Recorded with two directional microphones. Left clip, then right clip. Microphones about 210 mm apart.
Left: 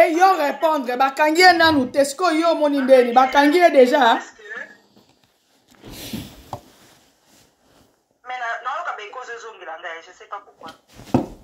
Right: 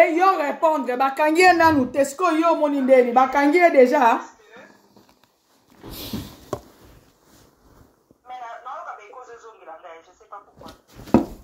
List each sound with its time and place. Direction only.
0.0 s a woman's voice: centre (ahead or behind)
8.3 s telephone: 50° left (ahead or behind)